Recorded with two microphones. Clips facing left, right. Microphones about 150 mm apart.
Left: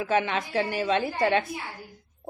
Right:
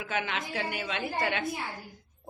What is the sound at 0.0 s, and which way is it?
A woman's voice, 35° left (ahead or behind).